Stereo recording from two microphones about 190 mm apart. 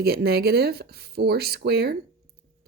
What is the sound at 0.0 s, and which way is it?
A woman's voice, 55° right (ahead or behind).